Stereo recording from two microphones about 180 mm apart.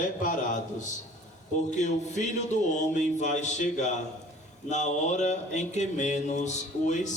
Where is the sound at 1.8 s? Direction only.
40° left (ahead or behind).